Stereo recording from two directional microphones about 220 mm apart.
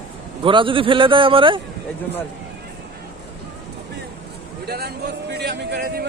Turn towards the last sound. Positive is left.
turn(degrees=-45)  # may be behind; listen again after turning